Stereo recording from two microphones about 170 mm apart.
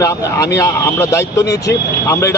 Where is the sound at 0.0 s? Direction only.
20° left (ahead or behind).